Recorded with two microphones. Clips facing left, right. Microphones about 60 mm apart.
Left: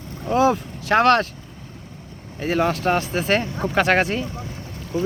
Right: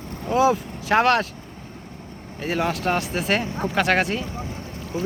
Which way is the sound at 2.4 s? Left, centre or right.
Centre.